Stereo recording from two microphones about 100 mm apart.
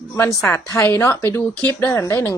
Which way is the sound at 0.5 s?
25° left (ahead or behind).